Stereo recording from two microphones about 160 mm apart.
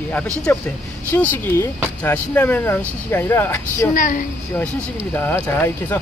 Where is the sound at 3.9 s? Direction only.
55° left (ahead or behind).